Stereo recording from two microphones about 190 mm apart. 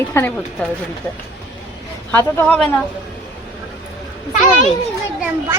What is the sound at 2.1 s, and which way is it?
Speech, 10° left (ahead or behind).